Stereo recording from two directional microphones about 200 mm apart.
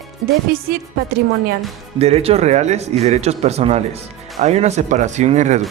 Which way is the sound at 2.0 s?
30° right (ahead or behind).